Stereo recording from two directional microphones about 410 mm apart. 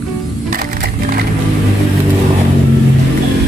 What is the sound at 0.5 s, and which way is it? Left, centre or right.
Crushing, right.